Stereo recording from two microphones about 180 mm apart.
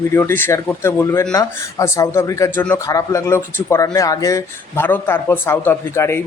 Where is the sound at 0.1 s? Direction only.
15° left (ahead or behind).